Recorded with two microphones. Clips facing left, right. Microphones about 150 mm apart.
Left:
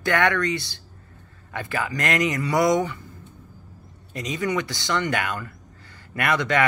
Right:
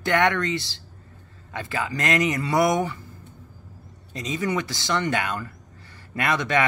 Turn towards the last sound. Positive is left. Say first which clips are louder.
# left 1 dB
turn(degrees=-20)  # may be behind; listen again after turning